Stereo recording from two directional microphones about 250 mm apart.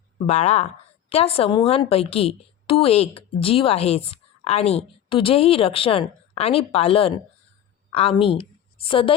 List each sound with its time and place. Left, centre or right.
0.3 s a woman's voice: left